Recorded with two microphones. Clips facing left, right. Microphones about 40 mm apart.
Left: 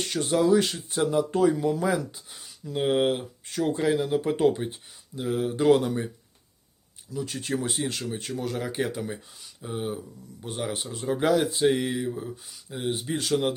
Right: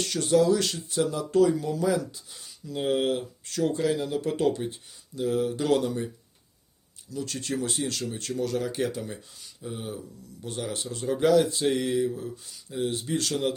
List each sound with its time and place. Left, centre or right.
0.0 s speech: centre
7.1 s speech: centre